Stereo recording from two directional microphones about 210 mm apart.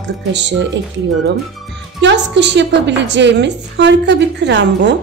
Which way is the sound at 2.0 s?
55° right (ahead or behind).